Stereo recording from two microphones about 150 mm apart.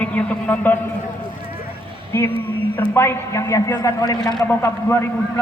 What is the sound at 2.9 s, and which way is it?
A man's voice, 15° left (ahead or behind).